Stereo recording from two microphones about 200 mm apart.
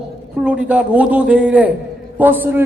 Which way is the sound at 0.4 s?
5° right (ahead or behind).